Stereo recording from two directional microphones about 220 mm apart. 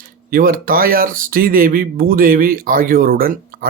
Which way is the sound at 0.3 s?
40° right (ahead or behind).